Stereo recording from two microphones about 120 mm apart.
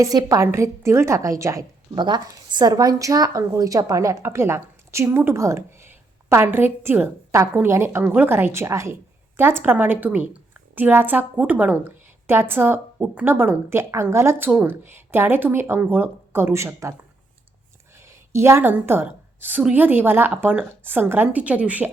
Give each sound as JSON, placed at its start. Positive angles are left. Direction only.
{"t": 0.0, "sound": "a woman's voice", "side_deg": -30}
{"t": 2.0, "sound": "a woman's voice", "side_deg": -40}
{"t": 17.9, "sound": "a woman's voice", "side_deg": -25}